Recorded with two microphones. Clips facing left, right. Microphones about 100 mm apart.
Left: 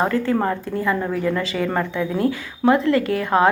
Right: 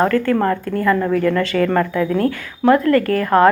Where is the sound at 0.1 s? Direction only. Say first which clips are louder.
Right 4 dB; 15° left (ahead or behind).